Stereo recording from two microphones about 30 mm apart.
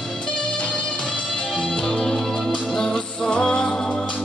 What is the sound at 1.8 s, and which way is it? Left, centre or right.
Music, left.